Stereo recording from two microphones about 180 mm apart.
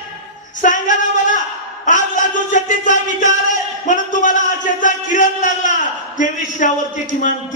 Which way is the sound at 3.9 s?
45° left (ahead or behind).